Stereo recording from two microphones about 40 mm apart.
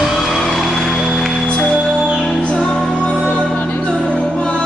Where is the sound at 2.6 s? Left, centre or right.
Left.